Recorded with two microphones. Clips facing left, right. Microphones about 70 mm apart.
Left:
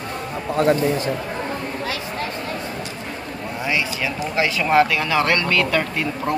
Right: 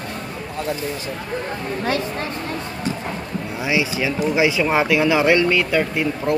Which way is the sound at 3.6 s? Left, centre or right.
Centre.